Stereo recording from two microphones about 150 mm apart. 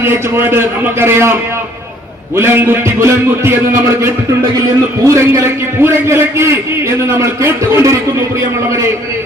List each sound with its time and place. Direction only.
0.0 s a man's voice: 15° right (ahead or behind)